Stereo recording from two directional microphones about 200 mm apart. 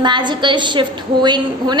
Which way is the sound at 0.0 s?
20° right (ahead or behind).